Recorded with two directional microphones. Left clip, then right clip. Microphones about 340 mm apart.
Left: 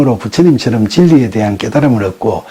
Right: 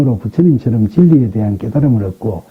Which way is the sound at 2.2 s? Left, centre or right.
Left.